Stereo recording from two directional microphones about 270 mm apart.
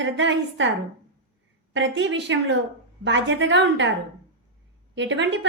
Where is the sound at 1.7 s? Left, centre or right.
Right.